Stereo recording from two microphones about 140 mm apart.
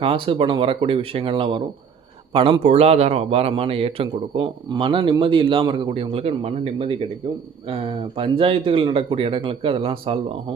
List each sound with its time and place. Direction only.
0.0 s a man's voice: 40° right (ahead or behind)